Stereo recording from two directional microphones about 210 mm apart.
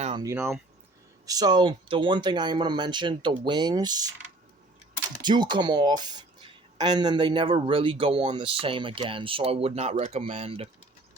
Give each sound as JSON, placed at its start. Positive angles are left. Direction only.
{"t": 0.0, "sound": "a sound", "side_deg": -25}
{"t": 0.3, "sound": "speech", "side_deg": -10}
{"t": 5.2, "sound": "speech", "side_deg": -20}